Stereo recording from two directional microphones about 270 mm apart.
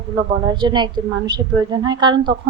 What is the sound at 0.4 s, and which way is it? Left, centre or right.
A woman's voice, centre.